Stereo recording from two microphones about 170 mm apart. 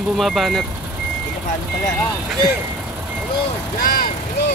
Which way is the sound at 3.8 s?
55° left (ahead or behind).